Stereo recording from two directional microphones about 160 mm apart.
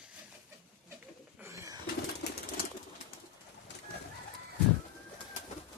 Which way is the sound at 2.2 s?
90° left.